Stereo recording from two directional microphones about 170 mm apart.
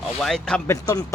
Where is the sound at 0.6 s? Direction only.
20° left (ahead or behind).